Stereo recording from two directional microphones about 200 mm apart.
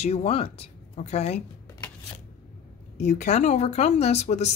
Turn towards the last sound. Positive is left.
turn(degrees=35)  # may be behind; listen again after turning